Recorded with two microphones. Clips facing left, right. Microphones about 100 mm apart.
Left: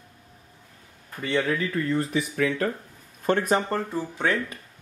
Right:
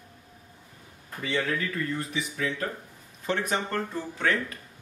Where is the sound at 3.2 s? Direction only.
45° left (ahead or behind).